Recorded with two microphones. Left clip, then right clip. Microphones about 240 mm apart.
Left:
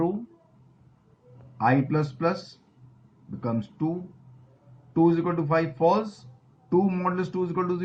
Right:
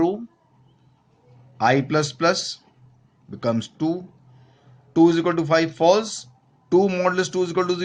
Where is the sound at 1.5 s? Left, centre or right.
Right.